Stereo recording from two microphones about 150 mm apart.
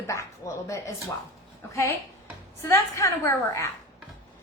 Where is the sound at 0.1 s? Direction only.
20° left (ahead or behind).